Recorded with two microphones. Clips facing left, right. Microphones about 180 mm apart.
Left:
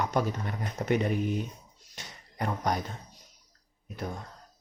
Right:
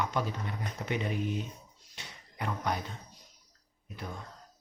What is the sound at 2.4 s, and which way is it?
Speech, 40° left (ahead or behind).